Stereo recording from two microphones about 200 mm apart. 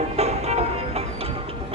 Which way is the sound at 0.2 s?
30° right (ahead or behind).